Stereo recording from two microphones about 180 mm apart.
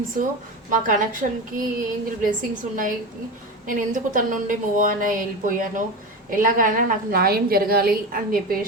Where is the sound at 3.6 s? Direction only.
50° right (ahead or behind).